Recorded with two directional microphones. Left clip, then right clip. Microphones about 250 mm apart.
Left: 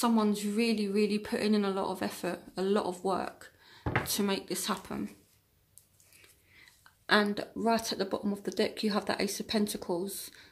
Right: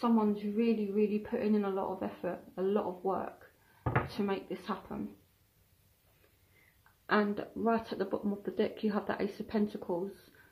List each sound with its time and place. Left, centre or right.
0.0 s speech: left
7.1 s speech: left